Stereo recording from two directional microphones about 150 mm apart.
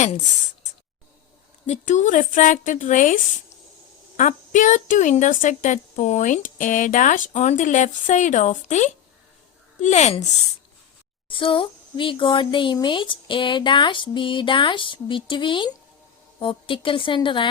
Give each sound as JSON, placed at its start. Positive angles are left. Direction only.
{"t": 1.6, "sound": "a woman's voice", "side_deg": 50}
{"t": 4.2, "sound": "a woman's voice", "side_deg": 55}
{"t": 11.3, "sound": "speech", "side_deg": 35}